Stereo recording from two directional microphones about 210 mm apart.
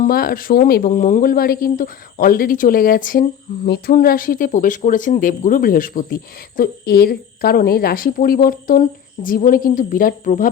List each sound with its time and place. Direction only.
0.0 s speech: 45° left (ahead or behind)